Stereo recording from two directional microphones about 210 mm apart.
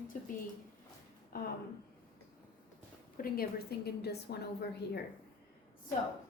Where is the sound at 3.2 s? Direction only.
40° left (ahead or behind).